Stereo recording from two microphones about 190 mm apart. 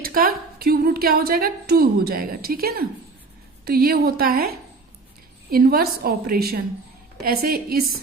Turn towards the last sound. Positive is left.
turn(degrees=-55)  # may be behind; listen again after turning